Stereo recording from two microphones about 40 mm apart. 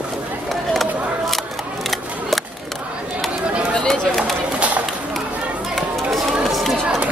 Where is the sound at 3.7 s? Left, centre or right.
Centre.